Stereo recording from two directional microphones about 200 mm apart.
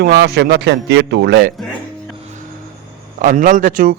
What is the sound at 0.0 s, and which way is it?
Speech, 60° right (ahead or behind).